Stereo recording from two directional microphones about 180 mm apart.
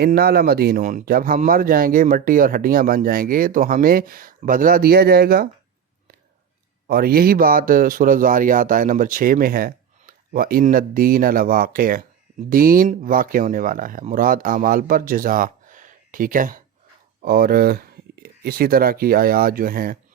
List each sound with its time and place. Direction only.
0.0 s speech: 60° right (ahead or behind)
6.8 s speech: 55° right (ahead or behind)